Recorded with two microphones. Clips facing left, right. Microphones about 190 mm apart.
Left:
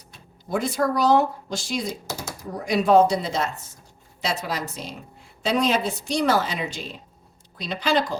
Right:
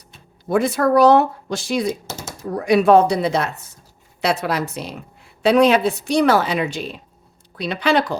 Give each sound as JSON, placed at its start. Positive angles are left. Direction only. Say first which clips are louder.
{"t": 0.4, "sound": "speech", "louder": "right 6 dB", "side_deg": -65}
{"t": 2.0, "sound": "a sound", "louder": "even", "side_deg": -25}
{"t": 2.4, "sound": "speech", "louder": "right 8 dB", "side_deg": -65}